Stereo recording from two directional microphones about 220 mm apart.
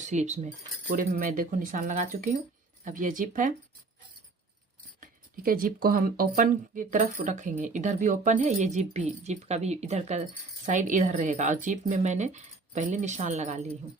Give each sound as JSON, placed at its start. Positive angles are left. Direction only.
{"t": 0.0, "sound": "speech", "side_deg": -30}
{"t": 4.9, "sound": "speech", "side_deg": -40}